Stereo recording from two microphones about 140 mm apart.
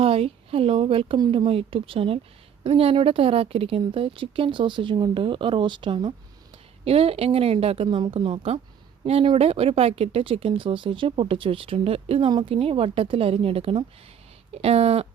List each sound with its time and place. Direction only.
0.0 s a woman's voice: 45° right (ahead or behind)